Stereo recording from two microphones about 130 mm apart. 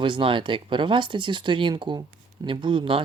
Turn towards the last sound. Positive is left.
turn(degrees=-40)  # may be behind; listen again after turning